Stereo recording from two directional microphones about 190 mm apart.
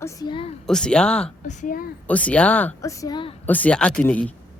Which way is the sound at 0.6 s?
5° left (ahead or behind).